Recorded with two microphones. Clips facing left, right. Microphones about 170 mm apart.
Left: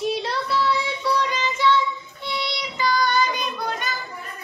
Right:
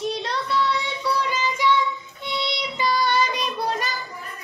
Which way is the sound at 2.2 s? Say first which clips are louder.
Right 1 dB; 20° right (ahead or behind).